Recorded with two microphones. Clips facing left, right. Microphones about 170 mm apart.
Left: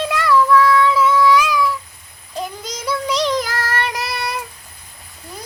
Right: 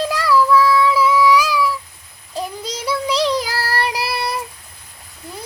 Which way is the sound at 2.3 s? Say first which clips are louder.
Right 1 dB; 30° right (ahead or behind).